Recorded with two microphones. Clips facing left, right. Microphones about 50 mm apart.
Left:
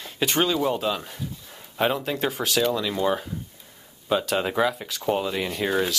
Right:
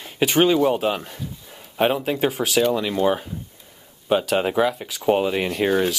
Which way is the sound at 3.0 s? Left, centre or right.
Centre.